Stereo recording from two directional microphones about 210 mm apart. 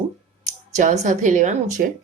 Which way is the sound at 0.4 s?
35° right (ahead or behind).